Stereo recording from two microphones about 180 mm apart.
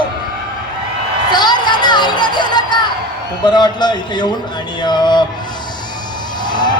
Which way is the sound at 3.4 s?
25° left (ahead or behind).